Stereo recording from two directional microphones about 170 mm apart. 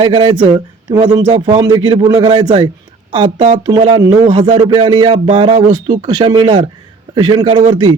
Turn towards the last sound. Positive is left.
turn(degrees=-30)  # may be behind; listen again after turning